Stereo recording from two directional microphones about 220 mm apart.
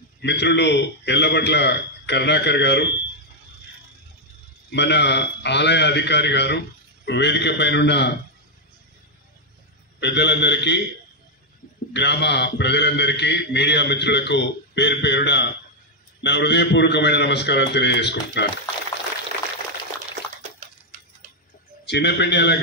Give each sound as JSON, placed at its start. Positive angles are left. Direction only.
{"t": 0.2, "sound": "a man's voice", "side_deg": 50}
{"t": 4.6, "sound": "a man's voice", "side_deg": 50}
{"t": 9.9, "sound": "a man's voice", "side_deg": 50}
{"t": 11.9, "sound": "a man's voice", "side_deg": 50}
{"t": 21.8, "sound": "a man's voice", "side_deg": 50}